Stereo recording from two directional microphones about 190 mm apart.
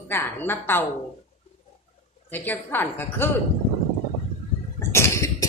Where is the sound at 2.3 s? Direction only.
10° left (ahead or behind).